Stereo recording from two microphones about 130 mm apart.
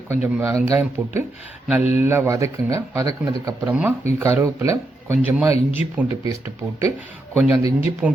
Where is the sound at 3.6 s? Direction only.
10° right (ahead or behind).